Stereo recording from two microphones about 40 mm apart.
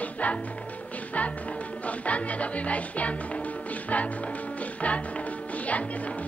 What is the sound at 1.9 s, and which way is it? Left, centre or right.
Music, left.